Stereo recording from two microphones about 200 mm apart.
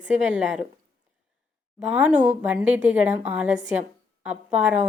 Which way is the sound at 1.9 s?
5° right (ahead or behind).